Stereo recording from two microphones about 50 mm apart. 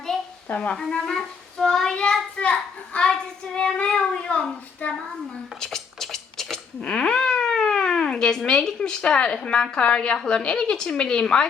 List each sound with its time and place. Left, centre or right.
0.4 s speech: left
0.7 s a child's voice: centre
5.5 s scratch: centre
6.8 s speech: centre